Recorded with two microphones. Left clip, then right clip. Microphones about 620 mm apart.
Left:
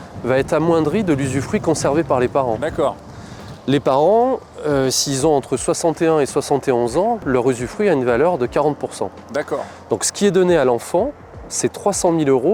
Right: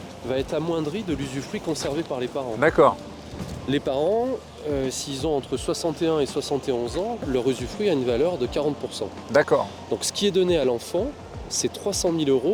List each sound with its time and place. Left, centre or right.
0.3 s speech: left
2.6 s speech: right
3.7 s speech: left
4.7 s speech: left
7.3 s speech: left
9.3 s speech: centre
9.9 s speech: left